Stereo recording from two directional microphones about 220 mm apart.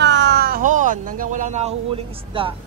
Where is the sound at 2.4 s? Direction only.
25° right (ahead or behind).